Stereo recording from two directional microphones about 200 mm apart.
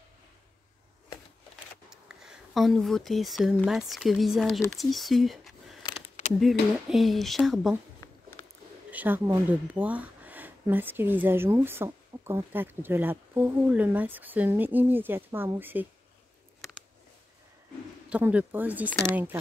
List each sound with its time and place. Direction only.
1.9 s speech: 5° right (ahead or behind)
6.9 s speech: centre (ahead or behind)
8.0 s a sound: 15° left (ahead or behind)
8.9 s speech: 10° right (ahead or behind)
18.1 s speech: 5° right (ahead or behind)